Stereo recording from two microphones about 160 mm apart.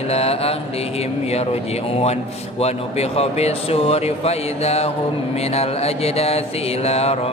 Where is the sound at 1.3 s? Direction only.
40° left (ahead or behind).